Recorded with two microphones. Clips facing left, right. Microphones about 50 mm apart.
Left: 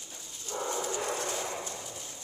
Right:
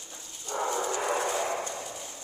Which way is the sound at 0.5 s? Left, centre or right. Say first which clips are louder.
Right 5 dB; right.